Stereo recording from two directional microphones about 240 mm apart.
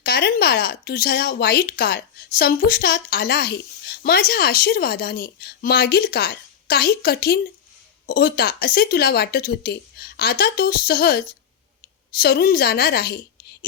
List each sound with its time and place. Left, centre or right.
0.0 s a woman's voice: left